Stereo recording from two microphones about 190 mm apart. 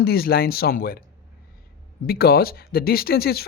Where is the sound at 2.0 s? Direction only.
55° left (ahead or behind).